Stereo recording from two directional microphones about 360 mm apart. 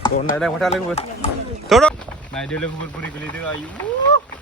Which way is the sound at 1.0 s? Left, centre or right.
Centre.